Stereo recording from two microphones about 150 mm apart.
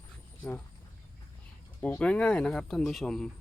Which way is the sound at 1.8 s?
10° left (ahead or behind).